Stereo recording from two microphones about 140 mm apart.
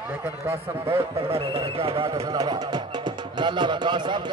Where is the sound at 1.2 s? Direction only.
45° right (ahead or behind).